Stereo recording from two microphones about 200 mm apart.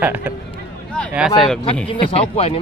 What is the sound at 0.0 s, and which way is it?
Speech, 10° right (ahead or behind).